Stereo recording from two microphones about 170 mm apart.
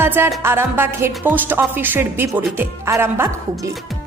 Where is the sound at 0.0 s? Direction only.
15° right (ahead or behind).